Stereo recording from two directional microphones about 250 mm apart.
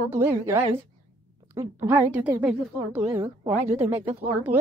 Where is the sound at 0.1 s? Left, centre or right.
Centre.